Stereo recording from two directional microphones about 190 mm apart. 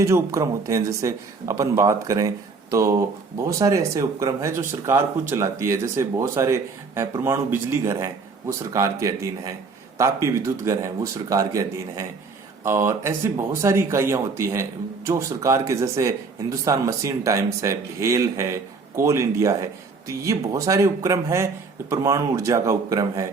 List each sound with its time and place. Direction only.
0.0 s speech: 15° right (ahead or behind)